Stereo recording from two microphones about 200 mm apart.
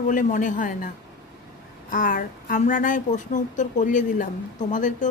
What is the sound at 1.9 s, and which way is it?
A woman's voice, 40° left (ahead or behind).